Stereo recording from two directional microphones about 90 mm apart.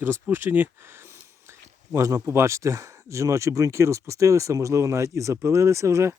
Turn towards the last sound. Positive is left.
turn(degrees=-30)  # may be behind; listen again after turning